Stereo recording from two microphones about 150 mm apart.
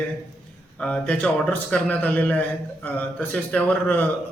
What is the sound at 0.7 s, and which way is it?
A man's voice, 5° left (ahead or behind).